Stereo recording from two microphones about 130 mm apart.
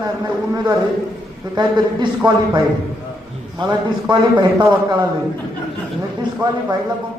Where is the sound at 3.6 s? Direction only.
35° right (ahead or behind).